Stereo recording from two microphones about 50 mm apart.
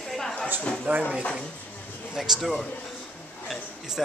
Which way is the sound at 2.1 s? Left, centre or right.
Centre.